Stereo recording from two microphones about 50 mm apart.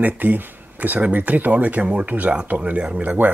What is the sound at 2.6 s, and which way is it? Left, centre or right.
Speech, right.